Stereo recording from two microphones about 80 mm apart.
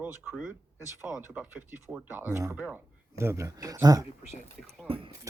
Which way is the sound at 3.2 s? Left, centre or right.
Right.